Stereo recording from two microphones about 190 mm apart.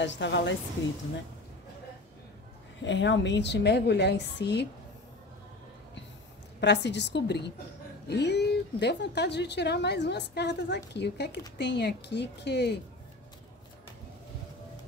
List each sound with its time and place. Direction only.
0.0 s speech: 70° left (ahead or behind)
2.8 s speech: 70° left (ahead or behind)
6.6 s speech: 65° left (ahead or behind)